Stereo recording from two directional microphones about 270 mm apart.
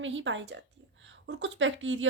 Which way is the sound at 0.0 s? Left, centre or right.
Right.